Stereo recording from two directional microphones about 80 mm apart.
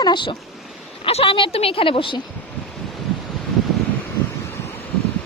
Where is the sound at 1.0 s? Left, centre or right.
Left.